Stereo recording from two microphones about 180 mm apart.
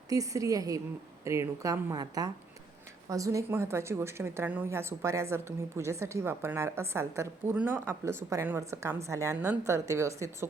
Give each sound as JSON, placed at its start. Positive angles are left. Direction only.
{"t": 0.1, "sound": "a woman's voice", "side_deg": -20}